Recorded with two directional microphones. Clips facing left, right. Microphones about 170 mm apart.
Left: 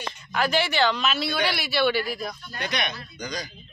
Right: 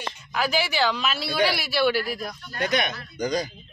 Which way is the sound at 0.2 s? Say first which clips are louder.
Left 1 dB; 5° right (ahead or behind).